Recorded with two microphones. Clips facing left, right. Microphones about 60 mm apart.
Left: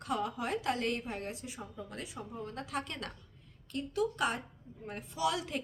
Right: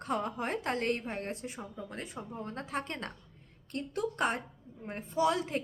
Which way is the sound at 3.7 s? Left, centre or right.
Right.